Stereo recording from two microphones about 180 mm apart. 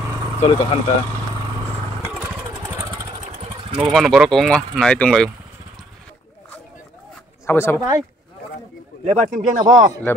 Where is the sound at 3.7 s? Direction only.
5° right (ahead or behind).